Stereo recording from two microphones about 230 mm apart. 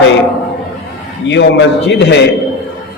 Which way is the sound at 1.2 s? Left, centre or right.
Left.